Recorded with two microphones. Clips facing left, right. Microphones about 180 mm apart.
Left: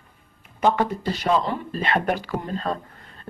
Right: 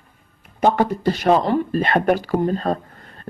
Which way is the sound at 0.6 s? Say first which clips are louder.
Right 4 dB; 40° right (ahead or behind).